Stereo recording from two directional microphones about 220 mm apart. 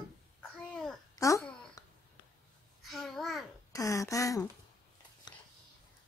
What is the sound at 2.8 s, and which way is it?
Babbling, centre (ahead or behind).